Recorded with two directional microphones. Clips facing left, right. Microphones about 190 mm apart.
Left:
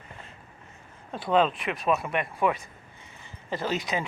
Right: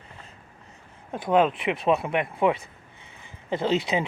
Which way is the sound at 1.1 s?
15° right (ahead or behind).